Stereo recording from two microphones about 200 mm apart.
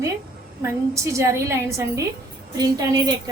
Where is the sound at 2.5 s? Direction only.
20° right (ahead or behind).